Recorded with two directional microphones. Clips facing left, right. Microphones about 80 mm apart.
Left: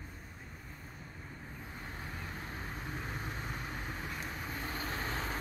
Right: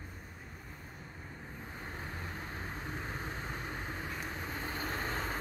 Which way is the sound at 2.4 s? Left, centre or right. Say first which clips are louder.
Right 1 dB; centre.